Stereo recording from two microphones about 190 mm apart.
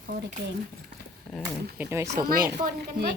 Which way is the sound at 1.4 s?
15° right (ahead or behind).